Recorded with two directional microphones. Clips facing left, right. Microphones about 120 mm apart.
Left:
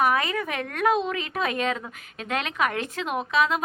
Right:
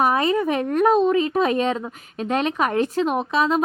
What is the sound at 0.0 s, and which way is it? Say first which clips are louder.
A woman's voice: right 5 dB; 30° right (ahead or behind).